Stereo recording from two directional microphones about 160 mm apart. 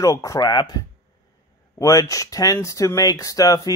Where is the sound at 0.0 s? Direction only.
20° left (ahead or behind).